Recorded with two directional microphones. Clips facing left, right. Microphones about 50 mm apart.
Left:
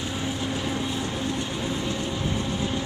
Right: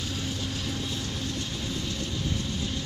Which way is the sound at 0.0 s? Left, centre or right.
Left.